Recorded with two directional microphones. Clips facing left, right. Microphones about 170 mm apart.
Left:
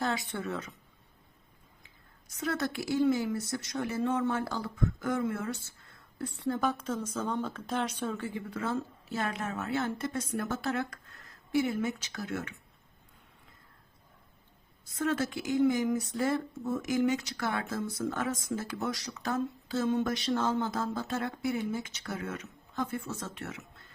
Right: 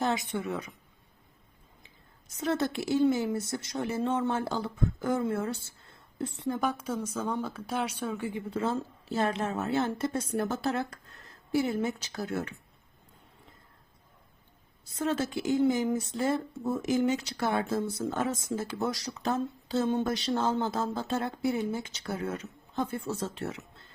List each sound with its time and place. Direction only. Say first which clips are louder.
0.0 s a woman's voice: right 3 dB; 20° right (ahead or behind)
2.3 s a woman's voice: right 3 dB; 25° right (ahead or behind)
14.9 s a woman's voice: right 1 dB; 30° right (ahead or behind)